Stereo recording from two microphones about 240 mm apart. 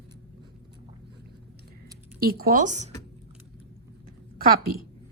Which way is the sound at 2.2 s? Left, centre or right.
Right.